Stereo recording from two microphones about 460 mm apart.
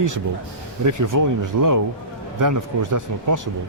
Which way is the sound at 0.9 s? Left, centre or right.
Right.